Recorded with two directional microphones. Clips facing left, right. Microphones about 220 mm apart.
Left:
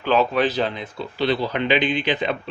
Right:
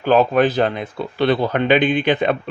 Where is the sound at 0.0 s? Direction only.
45° right (ahead or behind).